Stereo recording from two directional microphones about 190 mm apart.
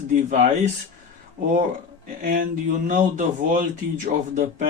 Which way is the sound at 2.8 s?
40° right (ahead or behind).